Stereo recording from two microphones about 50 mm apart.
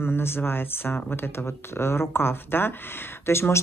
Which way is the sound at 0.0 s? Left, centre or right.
Left.